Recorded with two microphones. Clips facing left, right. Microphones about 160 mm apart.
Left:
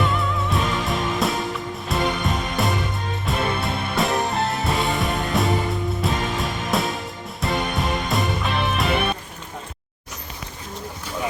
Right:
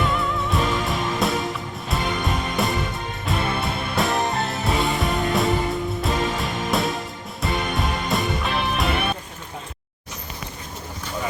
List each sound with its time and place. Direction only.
0.0 s music: centre (ahead or behind)